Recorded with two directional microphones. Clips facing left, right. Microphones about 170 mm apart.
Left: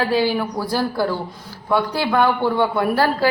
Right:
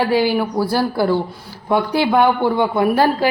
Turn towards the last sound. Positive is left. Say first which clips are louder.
# right 3 dB
turn(degrees=-15)  # may be behind; listen again after turning